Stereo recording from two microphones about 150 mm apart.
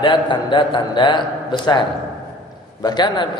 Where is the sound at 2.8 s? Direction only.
30° left (ahead or behind).